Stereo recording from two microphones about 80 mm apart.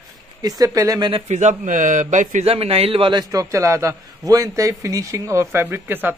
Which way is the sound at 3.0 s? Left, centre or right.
Right.